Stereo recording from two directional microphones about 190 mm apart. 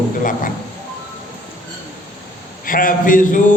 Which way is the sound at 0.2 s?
45° left (ahead or behind).